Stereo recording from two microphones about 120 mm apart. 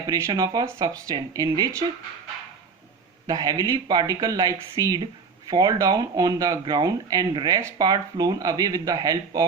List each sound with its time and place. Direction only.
0.1 s speech: 25° right (ahead or behind)
3.2 s speech: 30° right (ahead or behind)